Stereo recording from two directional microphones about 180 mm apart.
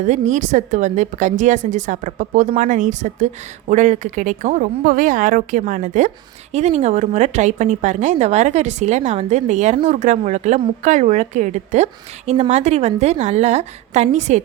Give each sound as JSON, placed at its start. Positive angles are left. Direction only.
{"t": 0.0, "sound": "speech", "side_deg": -40}